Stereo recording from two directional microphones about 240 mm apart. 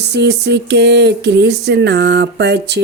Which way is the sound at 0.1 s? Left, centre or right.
Right.